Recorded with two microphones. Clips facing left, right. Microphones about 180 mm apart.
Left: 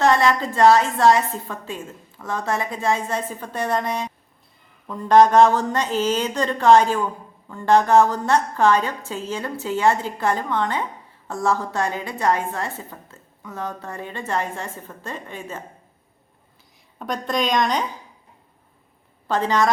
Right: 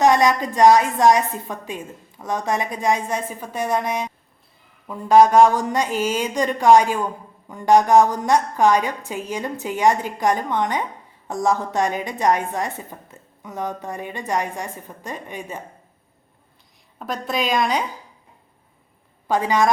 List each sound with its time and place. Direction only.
0.0 s a woman's voice: 15° right (ahead or behind)
17.0 s a woman's voice: 5° right (ahead or behind)
19.3 s a woman's voice: 10° right (ahead or behind)